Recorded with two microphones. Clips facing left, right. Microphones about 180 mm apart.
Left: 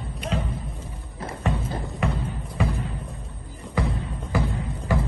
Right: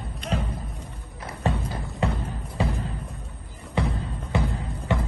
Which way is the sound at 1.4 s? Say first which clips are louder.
Right 1 dB; 35° right (ahead or behind).